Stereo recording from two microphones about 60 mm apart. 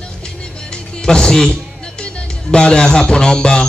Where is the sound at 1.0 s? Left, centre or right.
Centre.